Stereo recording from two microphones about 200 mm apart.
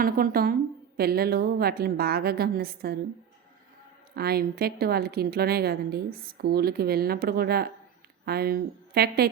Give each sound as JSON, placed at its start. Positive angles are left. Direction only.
{"t": 0.0, "sound": "a woman's voice", "side_deg": -45}
{"t": 4.1, "sound": "a woman's voice", "side_deg": -50}